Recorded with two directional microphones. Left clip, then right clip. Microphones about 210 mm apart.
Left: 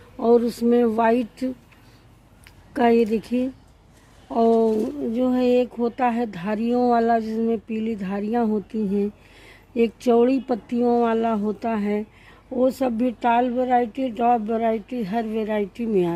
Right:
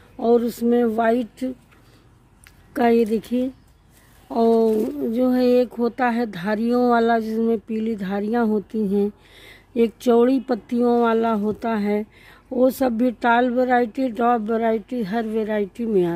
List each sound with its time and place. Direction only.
0.2 s speech: 15° right (ahead or behind)
2.7 s speech: 15° right (ahead or behind)